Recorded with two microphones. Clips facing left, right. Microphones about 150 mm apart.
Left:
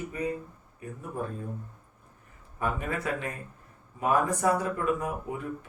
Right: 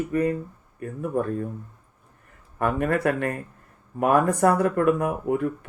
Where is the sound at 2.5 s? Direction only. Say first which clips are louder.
Right 8 dB; 60° right (ahead or behind).